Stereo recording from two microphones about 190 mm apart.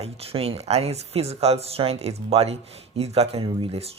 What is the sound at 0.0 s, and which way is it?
Speech, 30° right (ahead or behind).